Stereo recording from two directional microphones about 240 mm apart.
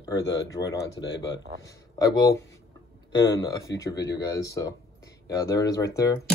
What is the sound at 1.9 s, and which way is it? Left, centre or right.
Speech, centre.